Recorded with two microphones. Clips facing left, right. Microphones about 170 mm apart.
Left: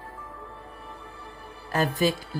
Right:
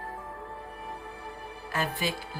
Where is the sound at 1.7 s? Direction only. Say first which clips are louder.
Left 7 dB; 40° left (ahead or behind).